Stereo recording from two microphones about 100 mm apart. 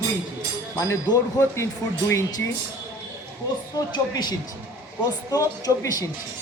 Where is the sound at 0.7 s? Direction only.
30° left (ahead or behind).